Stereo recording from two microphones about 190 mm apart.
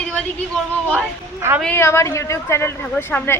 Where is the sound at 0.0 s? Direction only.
5° left (ahead or behind).